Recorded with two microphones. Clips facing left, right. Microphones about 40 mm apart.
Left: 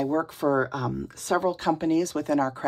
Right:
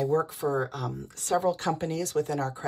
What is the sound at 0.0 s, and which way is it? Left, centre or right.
Speech, left.